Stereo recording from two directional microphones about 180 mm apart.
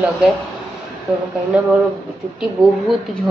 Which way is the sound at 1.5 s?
10° right (ahead or behind).